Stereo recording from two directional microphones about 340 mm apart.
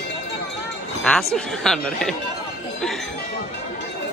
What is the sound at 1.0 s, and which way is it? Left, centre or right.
Speech, centre.